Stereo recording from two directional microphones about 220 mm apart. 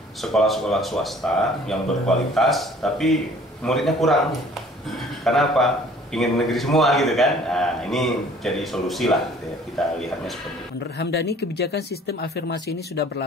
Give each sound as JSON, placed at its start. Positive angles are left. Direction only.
{"t": 0.2, "sound": "speech", "side_deg": 0}
{"t": 5.2, "sound": "speech", "side_deg": 0}
{"t": 11.0, "sound": "speech", "side_deg": 50}